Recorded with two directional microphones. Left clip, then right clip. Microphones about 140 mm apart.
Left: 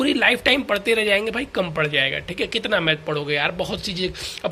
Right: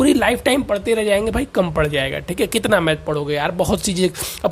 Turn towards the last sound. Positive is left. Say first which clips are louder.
# right 6 dB
turn(degrees=-85)